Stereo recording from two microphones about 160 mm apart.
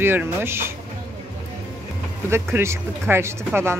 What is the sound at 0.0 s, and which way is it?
Speech, 15° right (ahead or behind).